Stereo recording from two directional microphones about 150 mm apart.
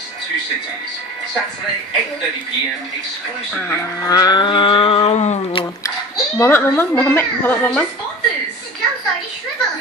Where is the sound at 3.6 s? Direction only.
20° left (ahead or behind); by 5.6 s 50° left (ahead or behind).